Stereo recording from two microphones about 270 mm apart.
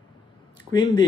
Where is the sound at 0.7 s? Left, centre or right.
Centre.